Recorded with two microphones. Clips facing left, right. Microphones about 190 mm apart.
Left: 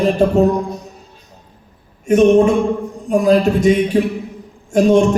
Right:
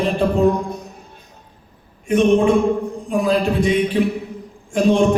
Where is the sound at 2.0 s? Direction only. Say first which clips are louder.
Left 4 dB; 45° left (ahead or behind).